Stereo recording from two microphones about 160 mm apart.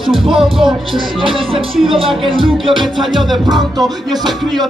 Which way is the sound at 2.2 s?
30° right (ahead or behind).